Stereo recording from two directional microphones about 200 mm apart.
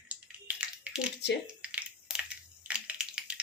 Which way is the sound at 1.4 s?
5° right (ahead or behind).